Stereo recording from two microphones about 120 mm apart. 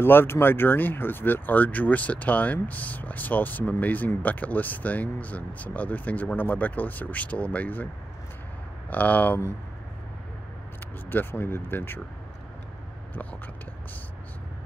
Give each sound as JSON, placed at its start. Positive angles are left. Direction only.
{"t": 0.0, "sound": "speech", "side_deg": 20}
{"t": 8.9, "sound": "speech", "side_deg": 15}
{"t": 11.1, "sound": "speech", "side_deg": 15}